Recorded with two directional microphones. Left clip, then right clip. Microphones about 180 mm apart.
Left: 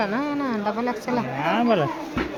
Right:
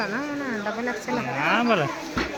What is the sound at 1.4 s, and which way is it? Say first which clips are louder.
Speech: even; 20° left (ahead or behind).